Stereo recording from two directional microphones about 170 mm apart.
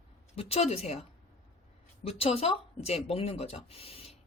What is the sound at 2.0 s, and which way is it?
Speech, 35° left (ahead or behind).